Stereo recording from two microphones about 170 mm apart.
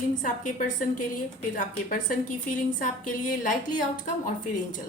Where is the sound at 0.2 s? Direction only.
50° left (ahead or behind).